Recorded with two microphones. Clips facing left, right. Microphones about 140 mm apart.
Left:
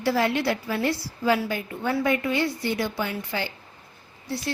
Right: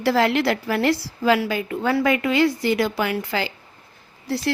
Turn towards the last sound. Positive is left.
turn(degrees=-85)